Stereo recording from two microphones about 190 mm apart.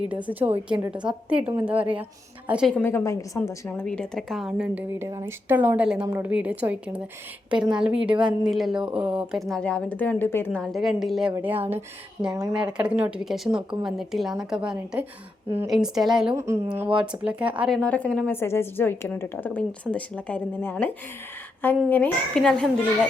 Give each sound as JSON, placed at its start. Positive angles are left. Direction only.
{"t": 0.1, "sound": "a woman's voice", "side_deg": -10}
{"t": 2.8, "sound": "a woman's voice", "side_deg": 15}
{"t": 12.7, "sound": "a woman's voice", "side_deg": -5}
{"t": 16.3, "sound": "speech", "side_deg": -15}
{"t": 17.7, "sound": "a woman's voice", "side_deg": 5}